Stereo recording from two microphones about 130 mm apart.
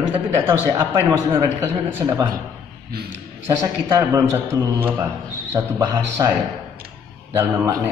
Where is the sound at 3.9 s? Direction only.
25° right (ahead or behind).